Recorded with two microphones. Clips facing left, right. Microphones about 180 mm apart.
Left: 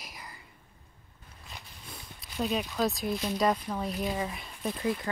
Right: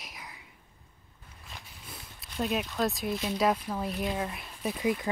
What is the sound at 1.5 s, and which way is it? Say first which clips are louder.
Speech: even; centre (ahead or behind).